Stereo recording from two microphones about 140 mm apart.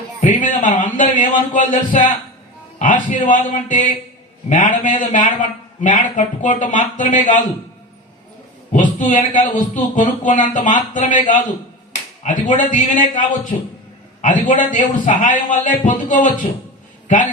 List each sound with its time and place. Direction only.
0.2 s a man's voice: 65° left (ahead or behind)
8.7 s a man's voice: 65° left (ahead or behind)